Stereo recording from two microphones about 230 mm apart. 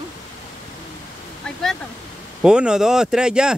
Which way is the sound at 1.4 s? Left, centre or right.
Centre.